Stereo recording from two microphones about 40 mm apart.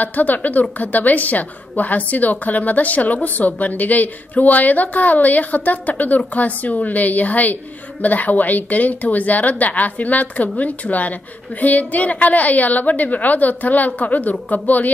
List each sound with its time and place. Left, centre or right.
0.0 s a woman's voice: left